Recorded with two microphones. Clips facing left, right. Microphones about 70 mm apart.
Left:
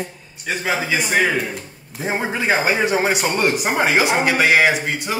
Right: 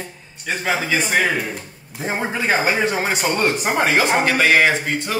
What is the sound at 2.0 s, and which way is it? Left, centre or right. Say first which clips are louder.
Speech: left 1 dB; centre.